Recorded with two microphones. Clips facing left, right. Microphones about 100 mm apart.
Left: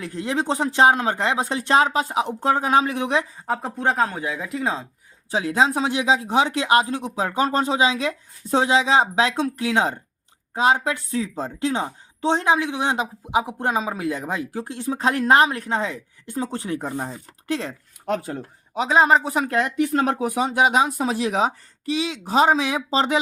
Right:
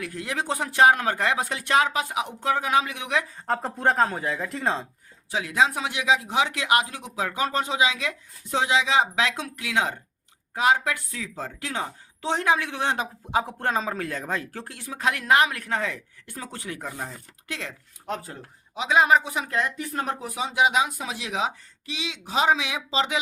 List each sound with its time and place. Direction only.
0.0 s a woman's voice: 25° left (ahead or behind)
3.4 s speech: 5° left (ahead or behind)
5.3 s a woman's voice: 30° left (ahead or behind); by 14.8 s 15° left (ahead or behind)
14.8 s a woman's voice: 30° left (ahead or behind)
18.0 s speech: 70° left (ahead or behind)
18.8 s speech: 35° left (ahead or behind)
19.5 s speech: 60° left (ahead or behind); by 23.2 s 40° left (ahead or behind)